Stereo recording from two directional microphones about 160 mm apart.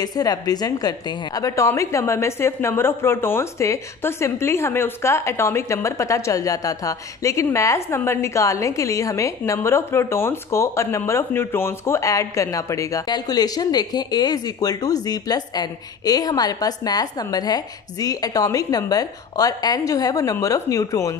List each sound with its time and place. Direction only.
0.0 s a woman's voice: 25° left (ahead or behind)